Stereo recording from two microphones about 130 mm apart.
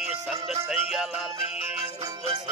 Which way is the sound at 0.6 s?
5° right (ahead or behind).